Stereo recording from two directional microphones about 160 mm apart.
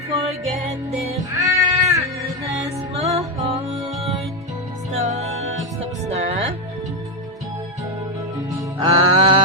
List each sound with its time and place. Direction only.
0.1 s music: 35° right (ahead or behind)
1.4 s cat: 20° right (ahead or behind)
3.0 s music: 40° right (ahead or behind)
4.9 s music: 40° right (ahead or behind)
8.4 s music: 25° right (ahead or behind)